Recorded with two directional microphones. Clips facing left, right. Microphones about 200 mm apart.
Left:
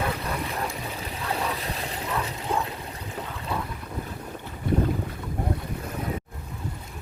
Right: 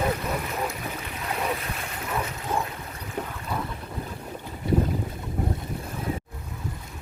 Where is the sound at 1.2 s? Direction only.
30° left (ahead or behind).